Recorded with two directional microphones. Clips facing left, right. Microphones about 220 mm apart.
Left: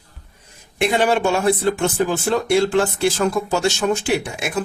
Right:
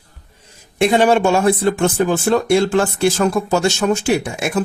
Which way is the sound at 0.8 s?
45° right (ahead or behind).